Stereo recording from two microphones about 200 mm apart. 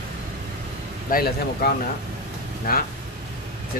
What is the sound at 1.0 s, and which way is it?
A man's voice, 50° left (ahead or behind).